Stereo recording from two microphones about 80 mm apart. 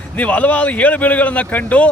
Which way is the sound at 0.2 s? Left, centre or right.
Centre.